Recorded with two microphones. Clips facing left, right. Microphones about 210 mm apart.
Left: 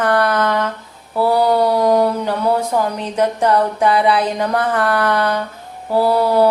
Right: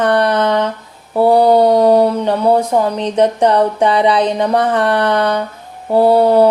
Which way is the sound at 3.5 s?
30° right (ahead or behind).